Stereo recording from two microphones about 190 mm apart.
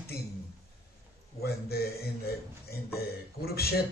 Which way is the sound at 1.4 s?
55° left (ahead or behind).